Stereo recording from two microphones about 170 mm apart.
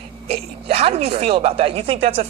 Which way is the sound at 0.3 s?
35° right (ahead or behind).